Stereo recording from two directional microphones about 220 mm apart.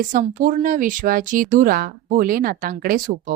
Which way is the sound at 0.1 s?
35° right (ahead or behind).